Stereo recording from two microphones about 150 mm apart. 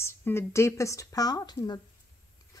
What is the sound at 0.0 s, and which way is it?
A woman's voice, 15° left (ahead or behind).